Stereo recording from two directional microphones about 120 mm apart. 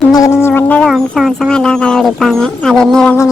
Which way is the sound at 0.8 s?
Centre (ahead or behind).